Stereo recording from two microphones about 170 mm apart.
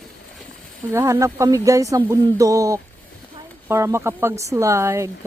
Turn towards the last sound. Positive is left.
turn(degrees=-15)  # may be behind; listen again after turning